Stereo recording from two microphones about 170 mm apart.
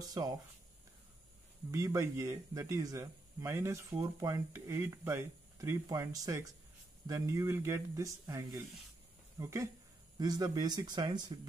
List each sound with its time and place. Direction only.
0.1 s speech: 20° right (ahead or behind)
1.7 s speech: 15° right (ahead or behind)